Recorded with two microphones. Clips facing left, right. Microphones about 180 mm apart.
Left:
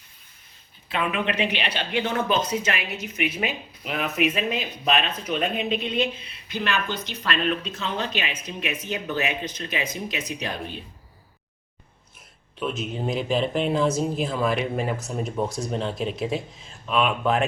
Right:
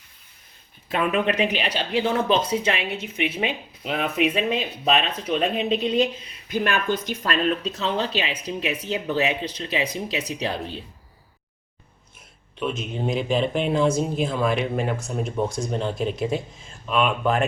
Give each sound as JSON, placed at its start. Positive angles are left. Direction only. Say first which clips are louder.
{"t": 0.9, "sound": "speech", "louder": "right 4 dB", "side_deg": -45}
{"t": 12.5, "sound": "speech", "louder": "right 1 dB", "side_deg": 0}